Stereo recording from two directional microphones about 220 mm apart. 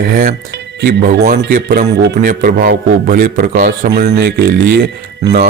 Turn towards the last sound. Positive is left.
turn(degrees=-45)  # may be behind; listen again after turning